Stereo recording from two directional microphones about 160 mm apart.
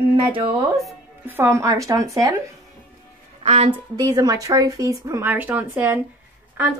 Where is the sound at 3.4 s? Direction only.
40° right (ahead or behind).